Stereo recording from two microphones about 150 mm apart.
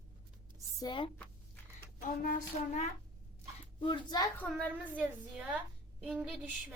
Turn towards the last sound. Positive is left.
turn(degrees=-5)  # may be behind; listen again after turning